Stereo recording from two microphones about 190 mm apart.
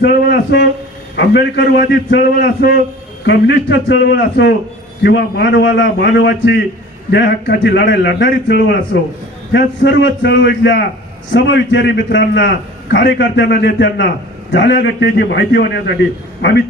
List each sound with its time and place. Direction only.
0.0 s a man's voice: 65° left (ahead or behind)